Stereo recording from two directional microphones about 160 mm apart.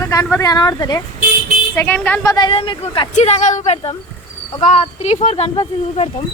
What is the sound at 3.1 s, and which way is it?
Speech, 45° left (ahead or behind).